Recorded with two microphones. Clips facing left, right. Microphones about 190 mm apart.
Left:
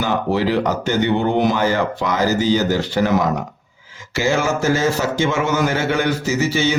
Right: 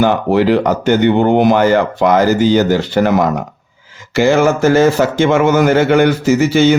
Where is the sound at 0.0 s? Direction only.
60° right (ahead or behind).